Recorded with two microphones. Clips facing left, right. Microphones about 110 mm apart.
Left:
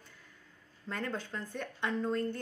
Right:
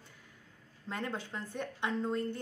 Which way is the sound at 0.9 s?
15° right (ahead or behind).